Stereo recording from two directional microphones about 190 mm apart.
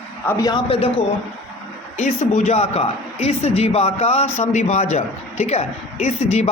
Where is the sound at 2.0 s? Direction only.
40° left (ahead or behind).